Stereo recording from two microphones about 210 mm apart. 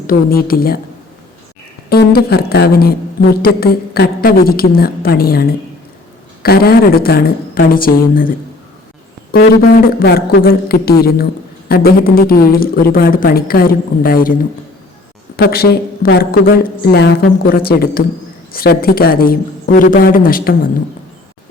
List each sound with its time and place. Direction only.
0.1 s a woman's voice: 45° left (ahead or behind)
1.9 s a woman's voice: 50° left (ahead or behind)
9.3 s a woman's voice: 45° left (ahead or behind)
15.4 s a woman's voice: 45° left (ahead or behind)